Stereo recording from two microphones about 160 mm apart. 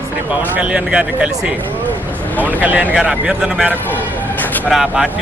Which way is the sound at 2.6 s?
10° right (ahead or behind).